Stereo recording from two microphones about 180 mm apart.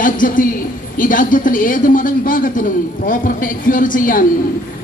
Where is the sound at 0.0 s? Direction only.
50° left (ahead or behind).